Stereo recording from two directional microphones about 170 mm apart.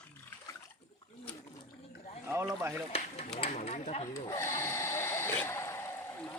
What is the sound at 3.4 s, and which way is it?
Speech, 40° left (ahead or behind).